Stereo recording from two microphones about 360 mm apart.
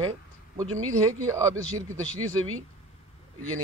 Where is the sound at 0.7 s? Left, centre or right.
Right.